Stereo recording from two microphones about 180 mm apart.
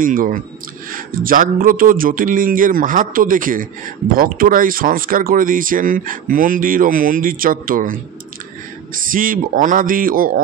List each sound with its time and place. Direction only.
0.0 s speech: 50° right (ahead or behind)